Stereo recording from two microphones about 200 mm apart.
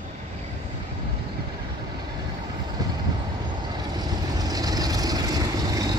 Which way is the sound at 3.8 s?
20° right (ahead or behind).